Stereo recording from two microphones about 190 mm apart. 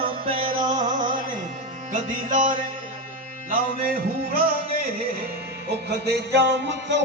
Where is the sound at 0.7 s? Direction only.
40° right (ahead or behind).